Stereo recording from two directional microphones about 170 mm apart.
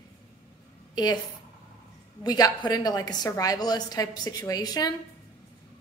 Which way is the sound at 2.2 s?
25° left (ahead or behind).